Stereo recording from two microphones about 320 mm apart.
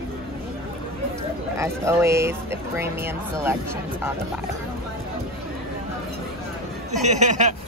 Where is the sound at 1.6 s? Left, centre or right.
Centre.